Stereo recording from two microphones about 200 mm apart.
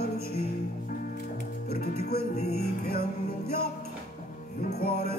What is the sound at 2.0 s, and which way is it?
Music, 50° left (ahead or behind).